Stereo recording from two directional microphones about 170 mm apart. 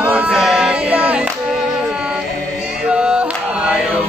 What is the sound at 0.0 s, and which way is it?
Music, 10° right (ahead or behind).